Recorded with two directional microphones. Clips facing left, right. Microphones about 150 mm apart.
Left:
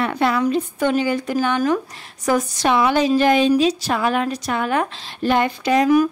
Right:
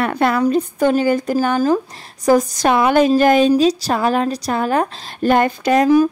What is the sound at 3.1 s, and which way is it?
Speech, 45° right (ahead or behind).